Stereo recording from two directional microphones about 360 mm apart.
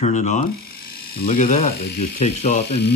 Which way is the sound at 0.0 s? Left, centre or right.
Centre.